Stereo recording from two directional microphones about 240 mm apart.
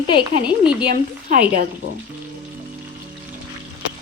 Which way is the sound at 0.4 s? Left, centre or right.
Centre.